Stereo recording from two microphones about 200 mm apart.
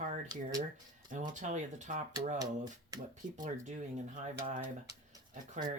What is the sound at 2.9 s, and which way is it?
Speech, 15° right (ahead or behind).